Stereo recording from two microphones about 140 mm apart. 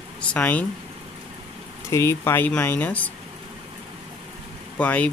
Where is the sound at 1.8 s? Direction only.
20° left (ahead or behind).